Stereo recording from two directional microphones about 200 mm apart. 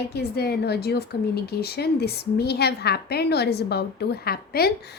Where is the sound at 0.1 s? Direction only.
55° left (ahead or behind).